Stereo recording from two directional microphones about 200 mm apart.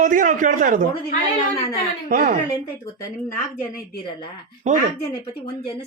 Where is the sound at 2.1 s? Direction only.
45° right (ahead or behind).